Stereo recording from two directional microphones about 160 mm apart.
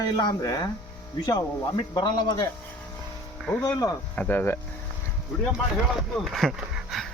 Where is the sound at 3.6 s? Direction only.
25° left (ahead or behind).